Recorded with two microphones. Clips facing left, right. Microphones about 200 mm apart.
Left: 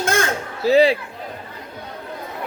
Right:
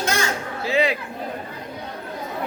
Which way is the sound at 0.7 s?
35° left (ahead or behind).